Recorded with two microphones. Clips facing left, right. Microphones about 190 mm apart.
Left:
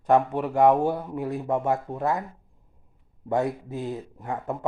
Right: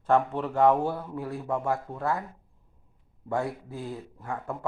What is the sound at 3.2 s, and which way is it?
Speech, 20° left (ahead or behind).